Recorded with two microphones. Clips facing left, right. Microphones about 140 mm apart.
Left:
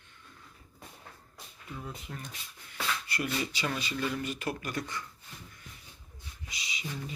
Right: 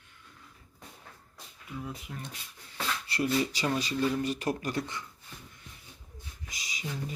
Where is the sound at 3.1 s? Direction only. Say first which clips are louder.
Right 10 dB; 30° right (ahead or behind).